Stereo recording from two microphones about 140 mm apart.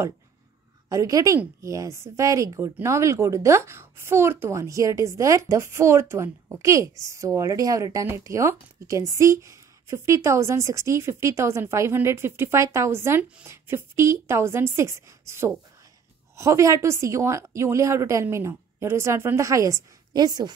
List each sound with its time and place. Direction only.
0.8 s speech: 25° right (ahead or behind)